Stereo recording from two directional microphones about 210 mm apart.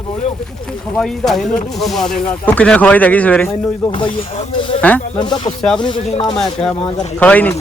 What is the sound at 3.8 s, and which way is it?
Speech, 25° left (ahead or behind).